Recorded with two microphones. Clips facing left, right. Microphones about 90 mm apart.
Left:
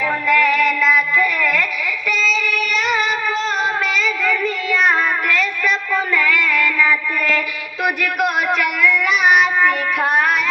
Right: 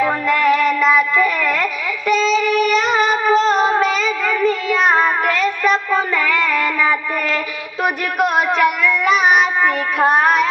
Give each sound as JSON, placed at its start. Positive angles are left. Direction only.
{"t": 0.0, "sound": "synthetic singing", "side_deg": -35}
{"t": 2.0, "sound": "a sound", "side_deg": -40}
{"t": 8.5, "sound": "child singing", "side_deg": -30}